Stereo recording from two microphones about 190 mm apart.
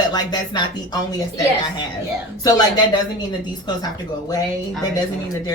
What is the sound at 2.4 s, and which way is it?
Speech, 20° left (ahead or behind).